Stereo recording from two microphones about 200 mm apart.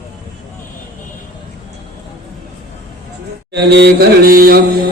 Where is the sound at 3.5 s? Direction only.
55° right (ahead or behind).